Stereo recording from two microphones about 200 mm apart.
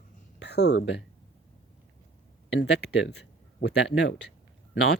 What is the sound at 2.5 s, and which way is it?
Speech, 60° left (ahead or behind).